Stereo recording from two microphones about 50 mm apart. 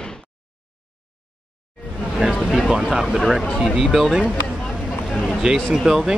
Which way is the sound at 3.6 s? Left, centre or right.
Centre.